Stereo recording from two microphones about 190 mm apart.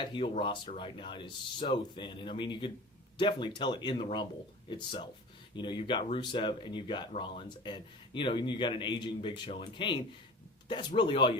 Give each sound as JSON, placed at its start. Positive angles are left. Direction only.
{"t": 0.0, "sound": "a man's voice", "side_deg": 25}